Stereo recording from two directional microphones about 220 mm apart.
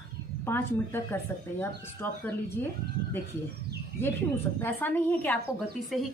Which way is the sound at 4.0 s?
10° left (ahead or behind).